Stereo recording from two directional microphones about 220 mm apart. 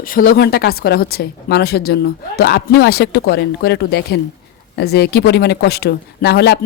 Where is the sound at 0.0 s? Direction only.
40° left (ahead or behind).